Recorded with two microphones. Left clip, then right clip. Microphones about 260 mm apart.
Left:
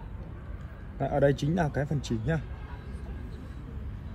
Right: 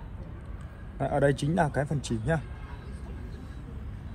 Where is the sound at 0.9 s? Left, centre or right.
Right.